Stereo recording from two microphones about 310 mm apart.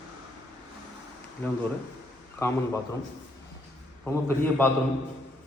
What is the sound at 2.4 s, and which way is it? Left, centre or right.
Speech, centre.